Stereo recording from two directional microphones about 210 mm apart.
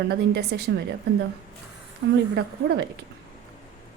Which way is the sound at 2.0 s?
60° right (ahead or behind).